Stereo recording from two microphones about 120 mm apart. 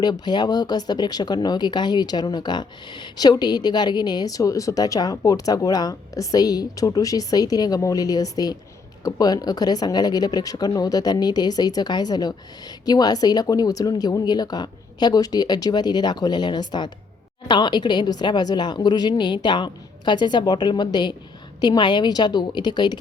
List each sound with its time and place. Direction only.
0.0 s speech: 35° left (ahead or behind)